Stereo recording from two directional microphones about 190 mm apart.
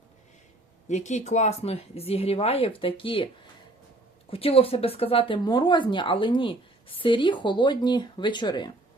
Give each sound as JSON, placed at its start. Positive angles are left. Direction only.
{"t": 0.9, "sound": "speech", "side_deg": 40}
{"t": 4.3, "sound": "speech", "side_deg": 30}